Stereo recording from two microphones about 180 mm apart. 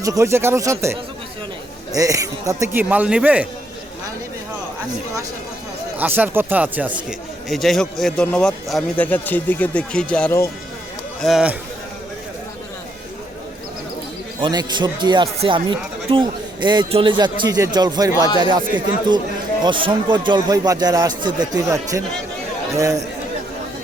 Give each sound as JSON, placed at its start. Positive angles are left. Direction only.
{"t": 0.0, "sound": "a man's voice", "side_deg": -15}
{"t": 6.0, "sound": "a man's voice", "side_deg": -10}
{"t": 11.2, "sound": "speech", "side_deg": 0}
{"t": 14.4, "sound": "speech", "side_deg": -25}
{"t": 18.3, "sound": "speech", "side_deg": 25}
{"t": 19.6, "sound": "a man's voice", "side_deg": -25}